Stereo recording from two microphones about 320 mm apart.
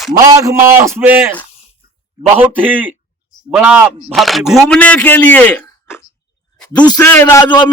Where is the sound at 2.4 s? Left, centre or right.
Centre.